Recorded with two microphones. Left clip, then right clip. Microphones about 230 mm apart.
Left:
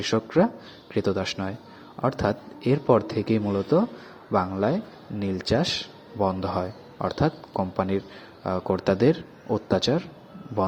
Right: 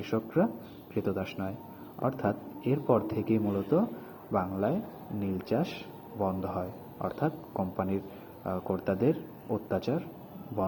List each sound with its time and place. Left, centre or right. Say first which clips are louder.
0.0 s a man's voice: left 7 dB; left